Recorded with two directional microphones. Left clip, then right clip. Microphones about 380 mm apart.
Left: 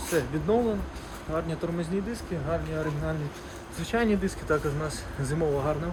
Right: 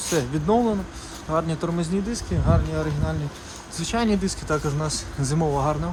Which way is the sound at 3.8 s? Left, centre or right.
Centre.